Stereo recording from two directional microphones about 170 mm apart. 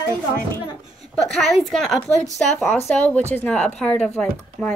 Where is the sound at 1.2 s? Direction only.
5° left (ahead or behind).